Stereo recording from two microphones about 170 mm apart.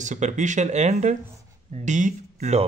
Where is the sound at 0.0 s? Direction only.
45° right (ahead or behind).